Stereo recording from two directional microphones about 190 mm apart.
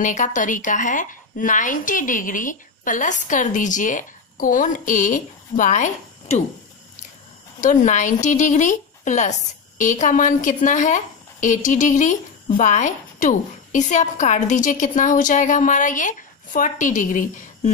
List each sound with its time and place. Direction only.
0.0 s a woman's voice: 40° left (ahead or behind)
7.6 s a woman's voice: 40° left (ahead or behind)